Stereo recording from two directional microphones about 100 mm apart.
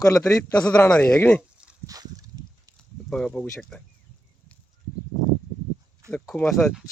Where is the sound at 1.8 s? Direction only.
35° right (ahead or behind).